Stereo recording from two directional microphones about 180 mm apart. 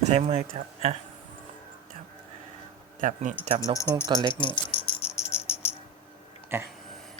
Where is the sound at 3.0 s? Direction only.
45° right (ahead or behind).